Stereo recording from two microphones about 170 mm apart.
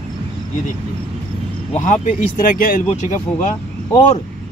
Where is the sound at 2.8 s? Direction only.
45° left (ahead or behind).